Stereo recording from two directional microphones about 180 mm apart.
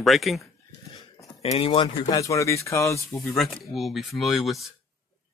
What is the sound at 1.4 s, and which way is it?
Speech, 35° left (ahead or behind).